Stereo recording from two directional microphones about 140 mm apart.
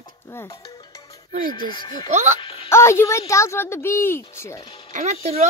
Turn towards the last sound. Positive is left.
turn(degrees=-55)  # may be behind; listen again after turning